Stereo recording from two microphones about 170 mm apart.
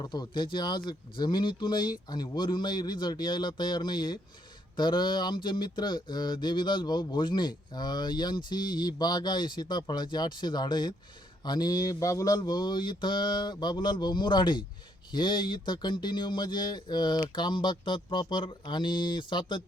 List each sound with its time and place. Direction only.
0.0 s speech: 25° left (ahead or behind)